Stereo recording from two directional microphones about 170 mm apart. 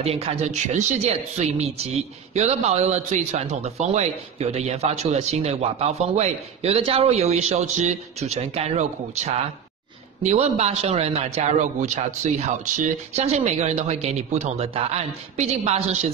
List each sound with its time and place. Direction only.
0.0 s a man's voice: 35° right (ahead or behind)